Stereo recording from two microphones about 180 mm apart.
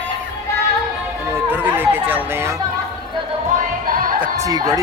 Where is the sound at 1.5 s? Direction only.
10° right (ahead or behind).